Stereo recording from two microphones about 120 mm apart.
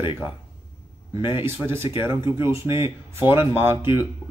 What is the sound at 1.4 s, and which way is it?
Speech, 20° right (ahead or behind).